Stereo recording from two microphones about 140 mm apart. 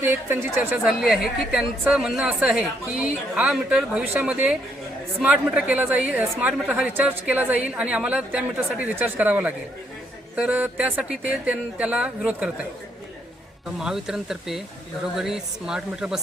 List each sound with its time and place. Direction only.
0.0 s speech: 15° right (ahead or behind)
0.9 s a woman's voice: centre (ahead or behind)
13.7 s a woman's voice: 5° right (ahead or behind)